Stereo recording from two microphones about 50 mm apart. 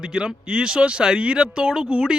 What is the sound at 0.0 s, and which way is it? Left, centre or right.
A man's voice, centre.